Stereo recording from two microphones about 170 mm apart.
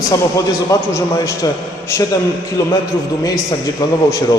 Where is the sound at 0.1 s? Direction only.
20° left (ahead or behind).